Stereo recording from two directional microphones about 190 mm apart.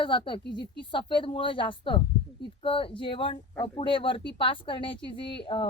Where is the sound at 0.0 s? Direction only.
25° left (ahead or behind).